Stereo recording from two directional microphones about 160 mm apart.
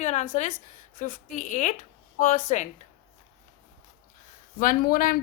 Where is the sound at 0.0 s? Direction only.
45° left (ahead or behind).